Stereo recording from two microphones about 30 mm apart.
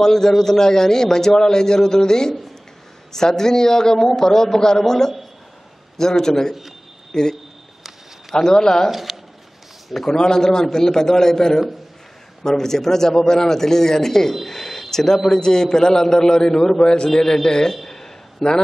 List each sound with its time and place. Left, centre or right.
0.0 s a man's voice: centre
8.4 s a man's voice: centre
8.9 s squish: centre
10.0 s a man's voice: left
14.3 s a sound: centre
15.3 s a man's voice: left
17.1 s a man's voice: centre
17.8 s a sound: centre
18.4 s a man's voice: centre